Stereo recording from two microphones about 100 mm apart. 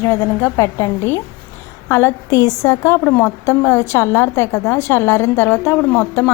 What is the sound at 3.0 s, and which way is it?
A woman's voice, 15° left (ahead or behind).